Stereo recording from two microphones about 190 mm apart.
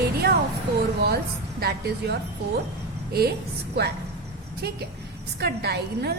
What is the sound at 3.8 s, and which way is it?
Speech, 60° right (ahead or behind).